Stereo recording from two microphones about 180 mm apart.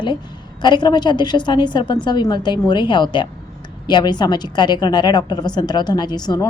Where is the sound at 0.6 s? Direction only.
25° left (ahead or behind).